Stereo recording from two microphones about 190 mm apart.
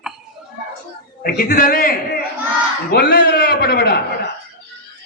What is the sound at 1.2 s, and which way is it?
Music, 50° left (ahead or behind).